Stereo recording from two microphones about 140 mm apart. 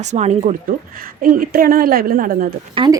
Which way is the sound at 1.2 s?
85° right.